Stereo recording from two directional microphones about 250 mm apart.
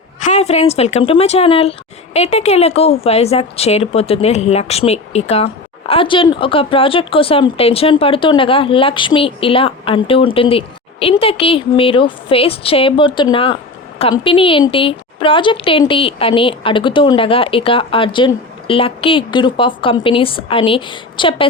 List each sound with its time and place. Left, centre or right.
0.2 s a woman's voice: left